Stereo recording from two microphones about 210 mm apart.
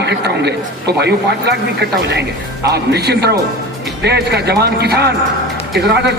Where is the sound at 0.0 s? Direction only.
55° right (ahead or behind).